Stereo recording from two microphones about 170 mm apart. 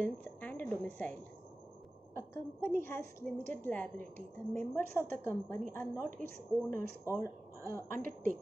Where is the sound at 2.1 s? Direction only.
15° left (ahead or behind).